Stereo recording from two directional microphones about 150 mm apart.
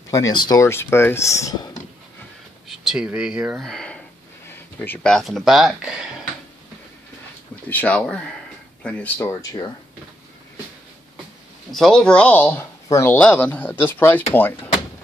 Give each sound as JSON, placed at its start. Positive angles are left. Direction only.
{"t": 0.1, "sound": "speech", "side_deg": 25}
{"t": 2.7, "sound": "speech", "side_deg": -5}
{"t": 7.7, "sound": "speech", "side_deg": 10}
{"t": 11.7, "sound": "speech", "side_deg": 5}